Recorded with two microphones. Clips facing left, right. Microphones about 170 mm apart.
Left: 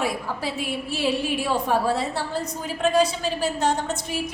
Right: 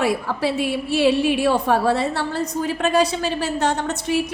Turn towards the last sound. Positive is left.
turn(degrees=-70)  # may be behind; listen again after turning